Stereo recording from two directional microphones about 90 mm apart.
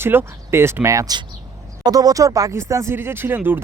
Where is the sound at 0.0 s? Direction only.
25° right (ahead or behind).